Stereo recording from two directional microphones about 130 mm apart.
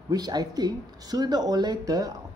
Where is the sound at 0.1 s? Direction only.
30° right (ahead or behind).